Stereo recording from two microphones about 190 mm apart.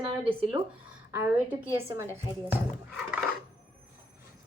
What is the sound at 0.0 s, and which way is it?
Speech, 30° right (ahead or behind).